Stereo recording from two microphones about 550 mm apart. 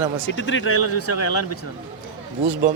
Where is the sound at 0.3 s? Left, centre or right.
Centre.